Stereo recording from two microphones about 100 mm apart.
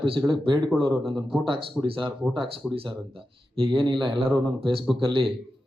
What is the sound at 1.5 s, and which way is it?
A man's voice, 55° right (ahead or behind).